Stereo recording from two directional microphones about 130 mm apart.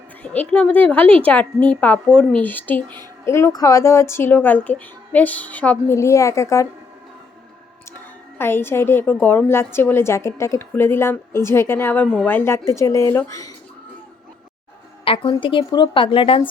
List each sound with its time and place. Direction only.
0.2 s a woman's voice: 10° left (ahead or behind)
6.0 s speech: 25° left (ahead or behind)
8.4 s a woman's voice: 15° left (ahead or behind)
15.0 s a woman's voice: 40° left (ahead or behind)